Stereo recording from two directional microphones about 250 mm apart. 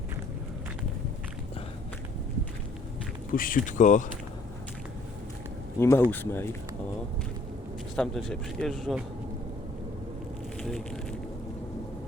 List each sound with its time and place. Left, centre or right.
3.3 s speech: left
5.8 s speech: centre
7.9 s speech: centre
10.6 s speech: centre